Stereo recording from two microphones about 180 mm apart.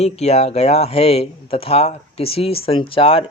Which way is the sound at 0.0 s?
35° left (ahead or behind).